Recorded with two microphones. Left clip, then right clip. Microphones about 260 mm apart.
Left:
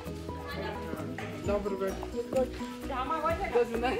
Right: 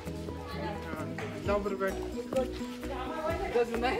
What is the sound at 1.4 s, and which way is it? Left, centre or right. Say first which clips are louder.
Speech: right 1 dB; centre.